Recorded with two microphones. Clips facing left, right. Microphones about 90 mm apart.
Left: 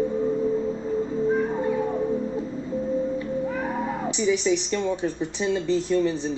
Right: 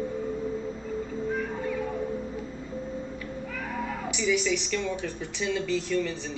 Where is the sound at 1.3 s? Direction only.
30° left (ahead or behind).